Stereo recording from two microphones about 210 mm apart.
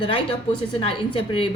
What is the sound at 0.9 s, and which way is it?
Speech, 25° left (ahead or behind).